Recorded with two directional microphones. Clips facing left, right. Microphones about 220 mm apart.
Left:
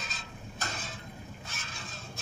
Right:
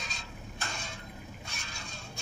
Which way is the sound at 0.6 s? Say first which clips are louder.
Left 2 dB; 40° left (ahead or behind).